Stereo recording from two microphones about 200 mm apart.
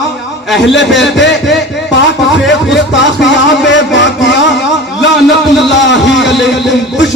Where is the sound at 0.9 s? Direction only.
60° left (ahead or behind).